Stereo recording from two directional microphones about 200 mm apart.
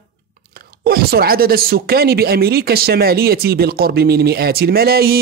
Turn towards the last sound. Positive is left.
turn(degrees=-50)  # may be behind; listen again after turning